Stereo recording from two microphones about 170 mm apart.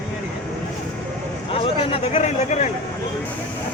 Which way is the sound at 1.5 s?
35° left (ahead or behind).